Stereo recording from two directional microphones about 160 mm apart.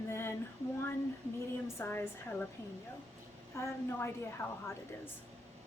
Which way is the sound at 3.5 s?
15° left (ahead or behind).